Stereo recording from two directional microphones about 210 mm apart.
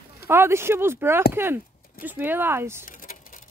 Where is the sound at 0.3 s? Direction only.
10° right (ahead or behind).